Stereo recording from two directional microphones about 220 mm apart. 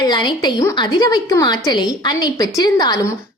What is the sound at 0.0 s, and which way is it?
A woman's voice, 20° left (ahead or behind).